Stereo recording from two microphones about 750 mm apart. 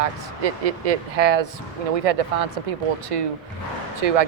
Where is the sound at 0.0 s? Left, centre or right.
Right.